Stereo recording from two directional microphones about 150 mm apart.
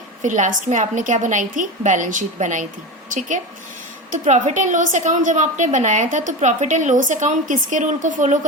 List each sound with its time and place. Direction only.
0.2 s a woman's voice: 55° right (ahead or behind)